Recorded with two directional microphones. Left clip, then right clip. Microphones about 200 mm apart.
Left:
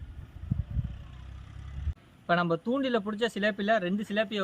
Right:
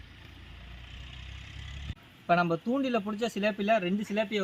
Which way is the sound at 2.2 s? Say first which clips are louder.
Right 1 dB; 20° left (ahead or behind).